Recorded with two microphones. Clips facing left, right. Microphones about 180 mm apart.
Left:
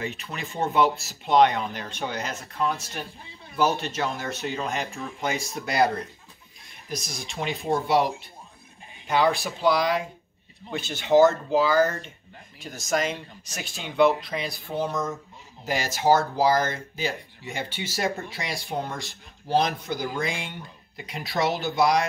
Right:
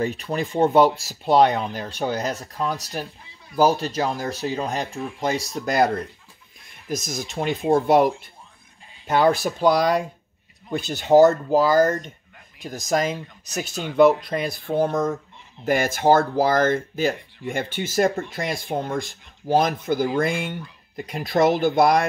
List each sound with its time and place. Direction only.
0.0 s speech: 40° right (ahead or behind); by 22.0 s 55° right (ahead or behind)